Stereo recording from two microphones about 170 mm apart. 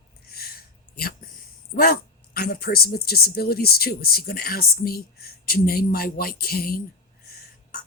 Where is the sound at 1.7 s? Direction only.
60° left (ahead or behind).